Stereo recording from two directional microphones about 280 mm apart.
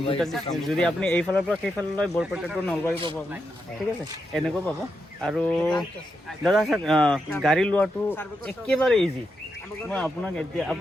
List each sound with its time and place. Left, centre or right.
0.2 s speech: centre
2.9 s a man's voice: centre
4.3 s speech: centre